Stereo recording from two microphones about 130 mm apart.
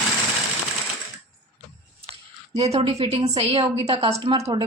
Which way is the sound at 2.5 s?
55° right (ahead or behind).